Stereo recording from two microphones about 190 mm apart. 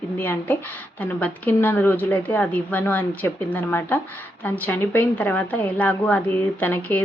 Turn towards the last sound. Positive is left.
turn(degrees=10)  # may be behind; listen again after turning